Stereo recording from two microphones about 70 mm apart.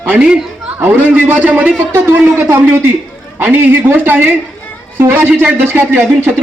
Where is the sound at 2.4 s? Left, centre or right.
Right.